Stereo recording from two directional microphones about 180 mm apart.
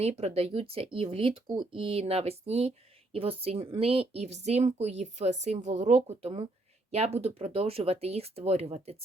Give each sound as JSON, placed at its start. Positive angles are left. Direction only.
{"t": 0.0, "sound": "speech", "side_deg": -35}